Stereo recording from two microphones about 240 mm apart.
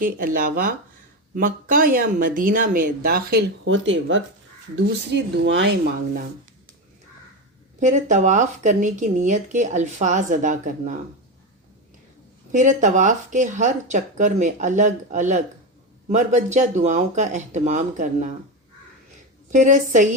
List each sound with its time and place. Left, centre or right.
0.0 s speech: right
7.8 s speech: right
12.5 s speech: right
19.5 s speech: right